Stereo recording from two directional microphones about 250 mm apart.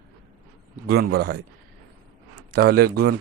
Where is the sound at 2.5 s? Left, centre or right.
Right.